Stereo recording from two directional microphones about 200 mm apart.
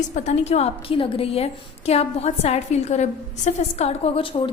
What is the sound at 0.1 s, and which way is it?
A woman's voice, 35° left (ahead or behind).